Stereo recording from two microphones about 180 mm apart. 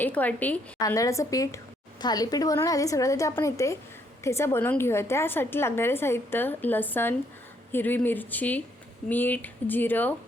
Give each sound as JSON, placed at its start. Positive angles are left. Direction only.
{"t": 0.0, "sound": "a woman's voice", "side_deg": 10}